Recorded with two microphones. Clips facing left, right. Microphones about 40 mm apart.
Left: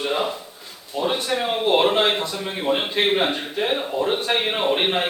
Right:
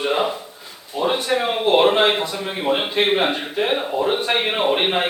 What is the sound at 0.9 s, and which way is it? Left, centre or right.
A man's voice, centre.